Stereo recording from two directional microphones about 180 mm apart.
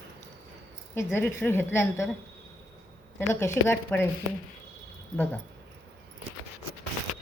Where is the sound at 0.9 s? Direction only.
10° left (ahead or behind).